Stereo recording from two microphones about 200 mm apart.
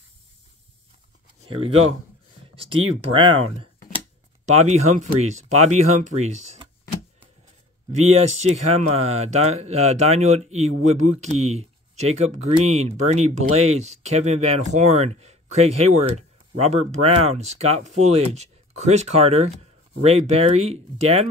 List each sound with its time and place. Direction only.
3.1 s speech: 25° right (ahead or behind)
8.0 s speech: 35° right (ahead or behind)